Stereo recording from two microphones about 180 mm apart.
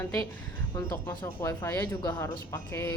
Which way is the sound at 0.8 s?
15° left (ahead or behind).